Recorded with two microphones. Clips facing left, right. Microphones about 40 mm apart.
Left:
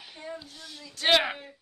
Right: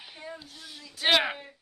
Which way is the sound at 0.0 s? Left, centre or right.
Centre.